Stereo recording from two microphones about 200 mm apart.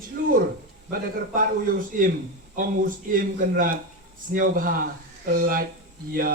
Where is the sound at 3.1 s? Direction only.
45° right (ahead or behind).